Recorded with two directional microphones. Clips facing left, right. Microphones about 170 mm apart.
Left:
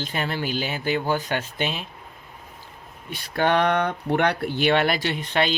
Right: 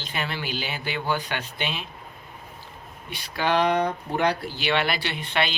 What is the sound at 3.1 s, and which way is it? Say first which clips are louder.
Speech: left 3 dB; 55° left (ahead or behind).